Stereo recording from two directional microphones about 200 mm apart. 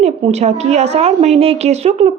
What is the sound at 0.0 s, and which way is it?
A woman's voice, 35° right (ahead or behind).